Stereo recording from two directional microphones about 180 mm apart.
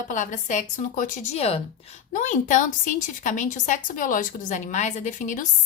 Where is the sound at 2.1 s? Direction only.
45° left (ahead or behind).